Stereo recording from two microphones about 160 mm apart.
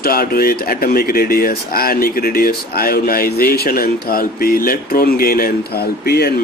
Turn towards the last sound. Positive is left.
turn(degrees=80)